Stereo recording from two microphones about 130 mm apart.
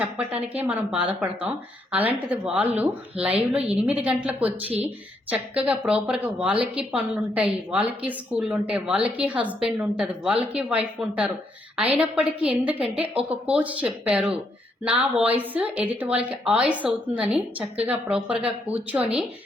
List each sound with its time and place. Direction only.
0.0 s speech: 10° right (ahead or behind)
13.2 s speech: 45° right (ahead or behind)
13.5 s speech: 10° right (ahead or behind)